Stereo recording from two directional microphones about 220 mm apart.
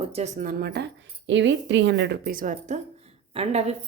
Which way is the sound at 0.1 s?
30° right (ahead or behind).